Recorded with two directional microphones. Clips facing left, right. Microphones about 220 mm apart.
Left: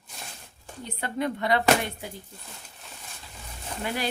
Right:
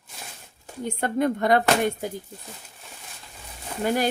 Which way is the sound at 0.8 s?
50° right (ahead or behind).